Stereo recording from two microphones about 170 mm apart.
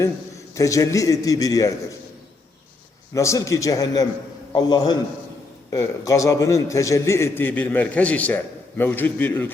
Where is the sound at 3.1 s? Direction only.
20° left (ahead or behind).